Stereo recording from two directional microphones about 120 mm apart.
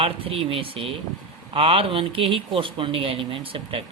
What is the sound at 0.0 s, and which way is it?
Speech, 50° right (ahead or behind).